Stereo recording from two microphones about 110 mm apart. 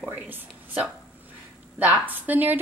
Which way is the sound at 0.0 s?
20° right (ahead or behind).